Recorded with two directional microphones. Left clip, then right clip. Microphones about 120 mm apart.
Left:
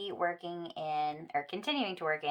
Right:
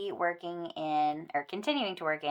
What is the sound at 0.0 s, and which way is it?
Speech, 35° right (ahead or behind).